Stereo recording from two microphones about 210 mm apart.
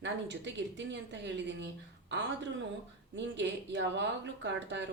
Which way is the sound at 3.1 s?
55° right (ahead or behind).